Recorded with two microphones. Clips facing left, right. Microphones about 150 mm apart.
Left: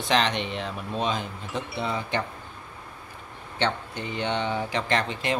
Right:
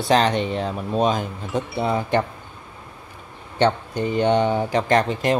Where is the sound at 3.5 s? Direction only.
45° right (ahead or behind).